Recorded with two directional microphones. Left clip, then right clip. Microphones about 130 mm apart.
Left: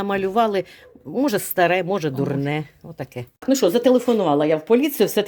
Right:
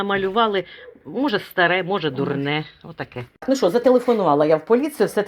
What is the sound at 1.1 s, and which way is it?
Speech, 90° left.